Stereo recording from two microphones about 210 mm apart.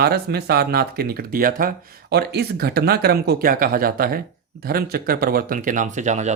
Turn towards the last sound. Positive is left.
turn(degrees=-35)  # may be behind; listen again after turning